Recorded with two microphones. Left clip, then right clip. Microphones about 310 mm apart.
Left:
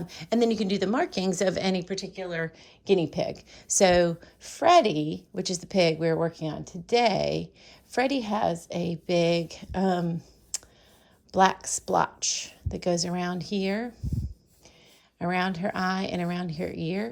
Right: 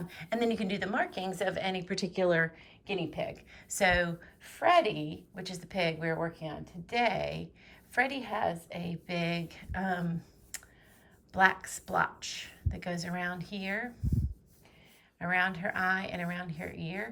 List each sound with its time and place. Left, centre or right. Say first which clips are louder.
0.1 s a woman's voice: left 6 dB; centre
1.9 s speech: right 4 dB; centre
2.6 s a woman's voice: left 11 dB; centre
8.3 s a woman's voice: left 5 dB; left
8.7 s a woman's voice: left 11 dB; centre
11.3 s a woman's voice: left 4 dB; centre
15.2 s a woman's voice: left 2 dB; centre